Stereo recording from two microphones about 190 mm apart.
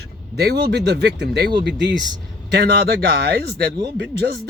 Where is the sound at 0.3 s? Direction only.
60° right (ahead or behind).